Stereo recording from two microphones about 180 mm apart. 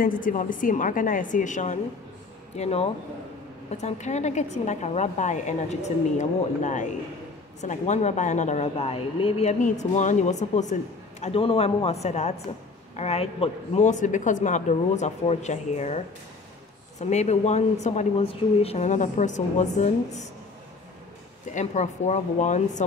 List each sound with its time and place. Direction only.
0.0 s a woman's voice: 50° left (ahead or behind)
17.0 s a woman's voice: 40° left (ahead or behind)
21.5 s a woman's voice: 40° left (ahead or behind)